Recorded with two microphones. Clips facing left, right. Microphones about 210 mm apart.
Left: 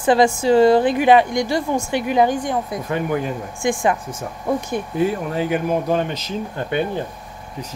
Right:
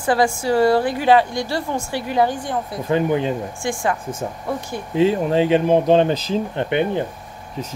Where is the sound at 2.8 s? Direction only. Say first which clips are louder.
Right 7 dB; 25° right (ahead or behind).